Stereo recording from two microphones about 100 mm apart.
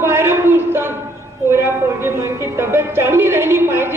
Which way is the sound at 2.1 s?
25° right (ahead or behind).